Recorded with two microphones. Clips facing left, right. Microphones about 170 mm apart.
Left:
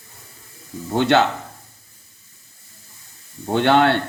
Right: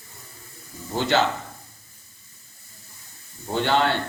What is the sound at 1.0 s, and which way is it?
Mantra, 65° left (ahead or behind).